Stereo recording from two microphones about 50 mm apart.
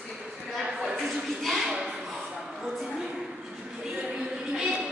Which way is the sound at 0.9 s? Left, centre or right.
Centre.